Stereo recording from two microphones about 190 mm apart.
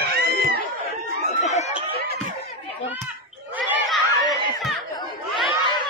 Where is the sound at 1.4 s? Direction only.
35° left (ahead or behind).